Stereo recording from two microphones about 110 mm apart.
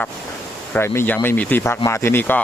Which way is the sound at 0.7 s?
20° left (ahead or behind).